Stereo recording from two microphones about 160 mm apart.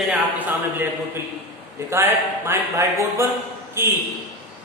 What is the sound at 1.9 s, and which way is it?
A man's voice, 15° right (ahead or behind).